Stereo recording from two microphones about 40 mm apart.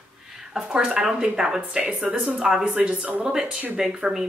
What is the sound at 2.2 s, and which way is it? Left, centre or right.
Speech, centre.